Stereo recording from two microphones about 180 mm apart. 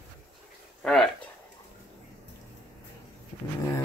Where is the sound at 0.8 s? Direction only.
5° left (ahead or behind).